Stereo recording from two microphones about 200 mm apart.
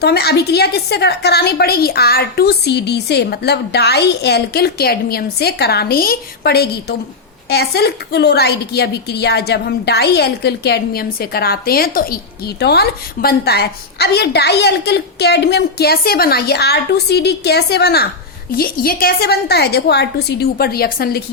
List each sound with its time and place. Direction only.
0.0 s a woman's voice: 55° left (ahead or behind)